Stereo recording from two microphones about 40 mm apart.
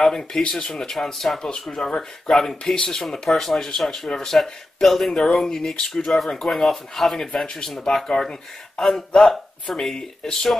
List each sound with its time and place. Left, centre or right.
0.0 s speech: centre
0.4 s speech: left
1.0 s speech: centre
1.4 s speech: centre
3.0 s speech: centre
7.4 s speech: centre